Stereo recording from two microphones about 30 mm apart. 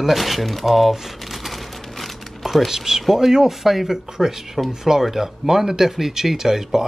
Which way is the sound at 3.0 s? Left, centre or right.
Centre.